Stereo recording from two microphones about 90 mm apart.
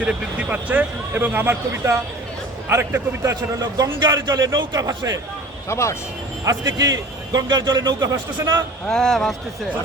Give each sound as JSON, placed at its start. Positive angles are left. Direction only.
{"t": 0.0, "sound": "a man's voice", "side_deg": -15}
{"t": 5.6, "sound": "speech", "side_deg": 30}
{"t": 6.4, "sound": "a man's voice", "side_deg": -40}
{"t": 8.9, "sound": "speech", "side_deg": 5}